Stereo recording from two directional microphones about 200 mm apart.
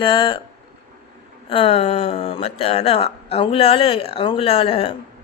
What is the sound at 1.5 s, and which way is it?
Speech, 30° left (ahead or behind).